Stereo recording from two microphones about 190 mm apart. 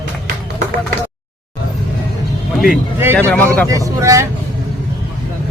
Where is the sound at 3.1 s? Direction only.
10° left (ahead or behind).